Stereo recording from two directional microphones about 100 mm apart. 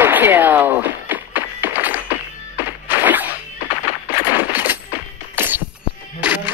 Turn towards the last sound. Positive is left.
turn(degrees=-15)  # may be behind; listen again after turning